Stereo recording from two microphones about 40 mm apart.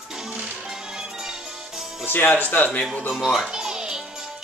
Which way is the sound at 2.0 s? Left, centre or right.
Left.